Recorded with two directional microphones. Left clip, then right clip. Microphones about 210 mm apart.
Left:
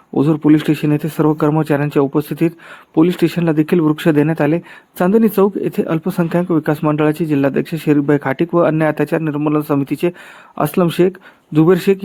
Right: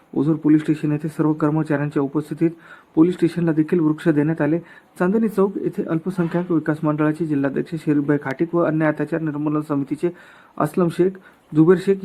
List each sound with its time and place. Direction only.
0.1 s speech: 30° left (ahead or behind)